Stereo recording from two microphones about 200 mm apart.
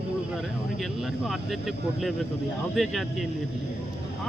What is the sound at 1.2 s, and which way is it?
Speech, centre (ahead or behind).